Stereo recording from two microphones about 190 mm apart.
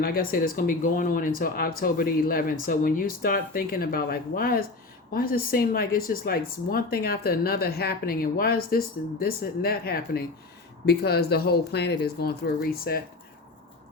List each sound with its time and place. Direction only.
0.0 s a woman's voice: 50° left (ahead or behind)